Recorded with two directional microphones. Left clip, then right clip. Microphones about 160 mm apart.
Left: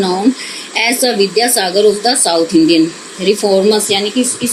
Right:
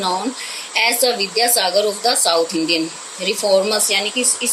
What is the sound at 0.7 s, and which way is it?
Speech, 55° right (ahead or behind).